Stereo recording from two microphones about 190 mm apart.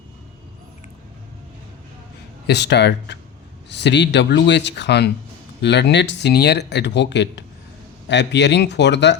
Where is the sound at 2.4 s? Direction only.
65° left (ahead or behind).